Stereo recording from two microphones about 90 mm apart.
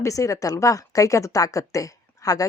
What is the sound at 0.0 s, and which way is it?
A woman's voice, 35° left (ahead or behind).